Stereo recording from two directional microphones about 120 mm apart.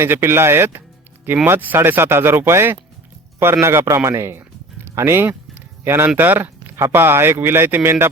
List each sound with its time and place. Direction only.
0.0 s speech: 20° right (ahead or behind)